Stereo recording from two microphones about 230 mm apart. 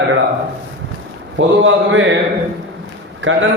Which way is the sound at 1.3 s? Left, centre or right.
Right.